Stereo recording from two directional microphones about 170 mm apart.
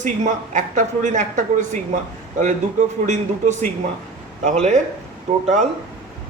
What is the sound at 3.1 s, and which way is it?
Speech, 45° right (ahead or behind).